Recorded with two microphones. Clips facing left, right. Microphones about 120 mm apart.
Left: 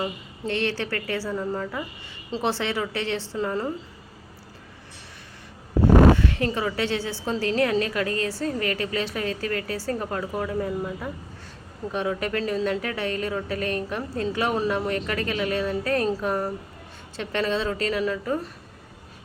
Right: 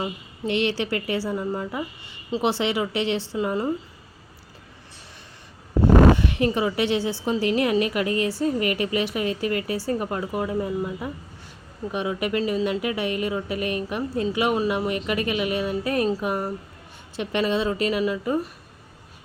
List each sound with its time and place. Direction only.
0.0 s a woman's voice: 15° right (ahead or behind)
6.1 s a woman's voice: 20° right (ahead or behind)